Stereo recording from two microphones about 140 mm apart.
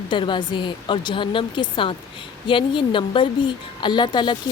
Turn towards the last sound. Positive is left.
turn(degrees=35)  # may be behind; listen again after turning